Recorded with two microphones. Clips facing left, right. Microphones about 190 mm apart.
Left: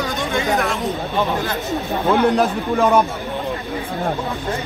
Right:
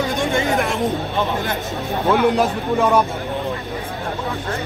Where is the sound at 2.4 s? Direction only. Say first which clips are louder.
Left 1 dB; centre (ahead or behind).